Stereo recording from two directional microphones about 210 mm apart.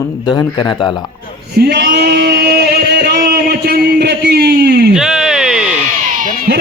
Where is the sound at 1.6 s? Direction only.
50° right (ahead or behind).